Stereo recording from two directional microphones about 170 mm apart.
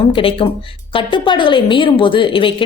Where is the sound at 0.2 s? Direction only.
30° left (ahead or behind).